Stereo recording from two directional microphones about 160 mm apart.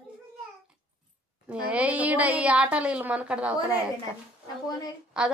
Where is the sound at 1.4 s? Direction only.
5° right (ahead or behind).